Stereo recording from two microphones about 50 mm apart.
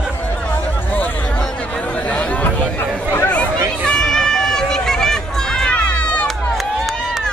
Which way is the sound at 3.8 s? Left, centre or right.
Centre.